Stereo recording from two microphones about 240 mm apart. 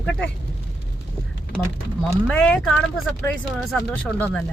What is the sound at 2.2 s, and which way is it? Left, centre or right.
Speech, centre.